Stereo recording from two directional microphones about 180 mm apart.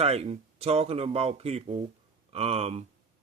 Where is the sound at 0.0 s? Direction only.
35° right (ahead or behind).